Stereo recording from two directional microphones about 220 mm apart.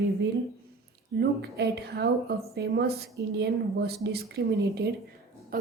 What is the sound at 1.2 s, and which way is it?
Speech, 45° right (ahead or behind).